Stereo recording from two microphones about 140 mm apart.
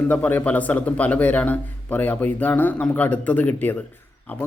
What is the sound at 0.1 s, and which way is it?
Speech, 10° left (ahead or behind).